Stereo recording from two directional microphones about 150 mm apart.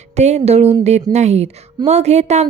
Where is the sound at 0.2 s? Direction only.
50° right (ahead or behind).